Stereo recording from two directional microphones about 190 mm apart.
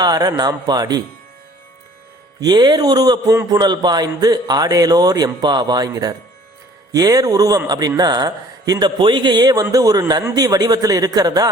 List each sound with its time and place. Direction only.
0.0 s speech: 20° right (ahead or behind)
2.4 s speech: 20° right (ahead or behind)